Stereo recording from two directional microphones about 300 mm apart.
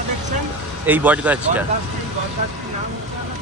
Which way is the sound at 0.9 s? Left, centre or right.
Centre.